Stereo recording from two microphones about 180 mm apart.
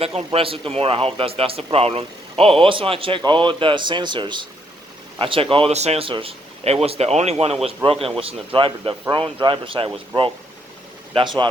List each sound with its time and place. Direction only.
0.0 s speech: 30° right (ahead or behind)